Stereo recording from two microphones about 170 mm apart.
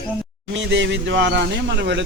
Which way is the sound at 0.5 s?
90° right.